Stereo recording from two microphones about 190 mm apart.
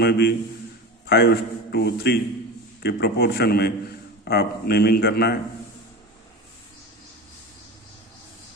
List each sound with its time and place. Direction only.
0.0 s a man's voice: 60° left (ahead or behind)